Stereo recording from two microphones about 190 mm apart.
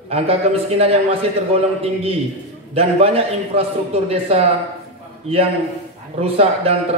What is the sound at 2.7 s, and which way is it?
A man's voice, 30° right (ahead or behind).